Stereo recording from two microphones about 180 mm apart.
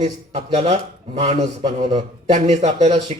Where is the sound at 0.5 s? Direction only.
40° right (ahead or behind).